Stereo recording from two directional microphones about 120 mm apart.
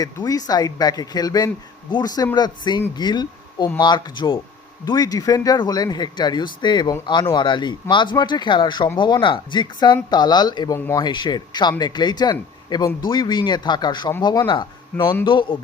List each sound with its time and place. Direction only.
0.0 s a man's voice: 30° left (ahead or behind)